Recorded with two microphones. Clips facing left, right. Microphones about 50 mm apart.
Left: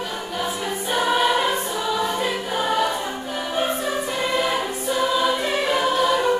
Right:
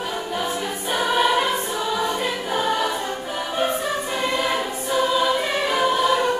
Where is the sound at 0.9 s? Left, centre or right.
Centre.